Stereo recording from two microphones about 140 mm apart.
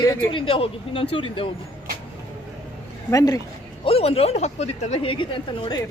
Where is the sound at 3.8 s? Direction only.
45° left (ahead or behind).